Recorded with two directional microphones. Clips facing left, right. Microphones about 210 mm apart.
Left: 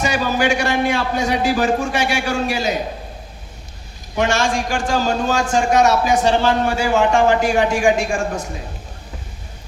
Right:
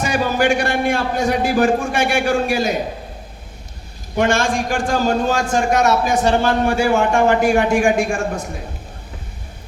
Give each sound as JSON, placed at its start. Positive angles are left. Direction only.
{"t": 0.0, "sound": "a man's voice", "side_deg": -55}
{"t": 4.2, "sound": "a man's voice", "side_deg": -55}